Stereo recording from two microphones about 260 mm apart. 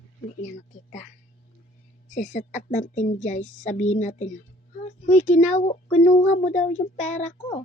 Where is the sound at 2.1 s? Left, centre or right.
Left.